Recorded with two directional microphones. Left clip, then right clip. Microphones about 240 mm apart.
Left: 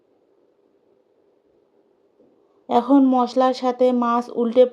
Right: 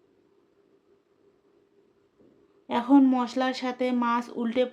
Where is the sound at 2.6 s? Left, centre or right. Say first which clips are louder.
Left 5 dB; centre.